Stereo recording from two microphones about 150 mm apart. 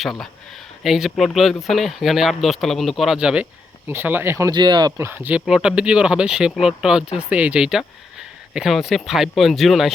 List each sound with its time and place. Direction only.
0.0 s speech: centre (ahead or behind)